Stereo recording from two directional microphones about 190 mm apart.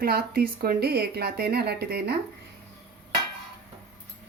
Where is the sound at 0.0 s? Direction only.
50° right (ahead or behind).